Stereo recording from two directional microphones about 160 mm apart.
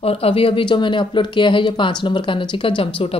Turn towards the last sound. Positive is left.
turn(degrees=35)  # may be behind; listen again after turning